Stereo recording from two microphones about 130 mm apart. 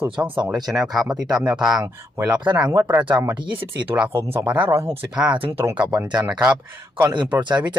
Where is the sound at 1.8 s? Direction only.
20° right (ahead or behind).